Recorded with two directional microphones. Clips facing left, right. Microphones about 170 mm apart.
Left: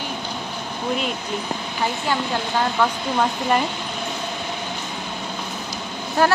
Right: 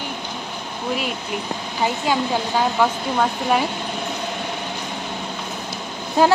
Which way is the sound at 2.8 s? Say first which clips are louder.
Right 1 dB; 5° right (ahead or behind).